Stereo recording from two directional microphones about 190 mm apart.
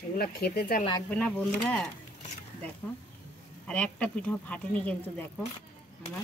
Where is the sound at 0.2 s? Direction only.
55° left (ahead or behind).